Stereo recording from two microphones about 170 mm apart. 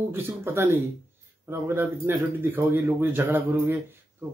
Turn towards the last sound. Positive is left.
turn(degrees=-10)  # may be behind; listen again after turning